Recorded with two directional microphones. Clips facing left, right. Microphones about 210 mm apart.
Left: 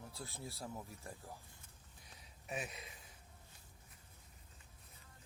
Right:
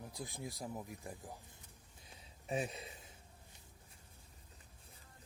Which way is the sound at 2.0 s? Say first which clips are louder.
Right 2 dB; 25° right (ahead or behind).